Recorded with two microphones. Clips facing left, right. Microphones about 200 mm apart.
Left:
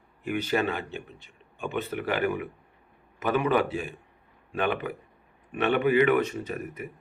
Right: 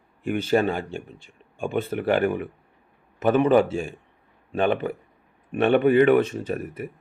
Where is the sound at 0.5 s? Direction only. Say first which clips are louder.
Right 7 dB; 40° right (ahead or behind).